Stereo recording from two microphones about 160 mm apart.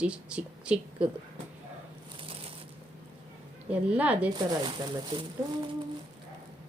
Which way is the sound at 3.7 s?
10° right (ahead or behind).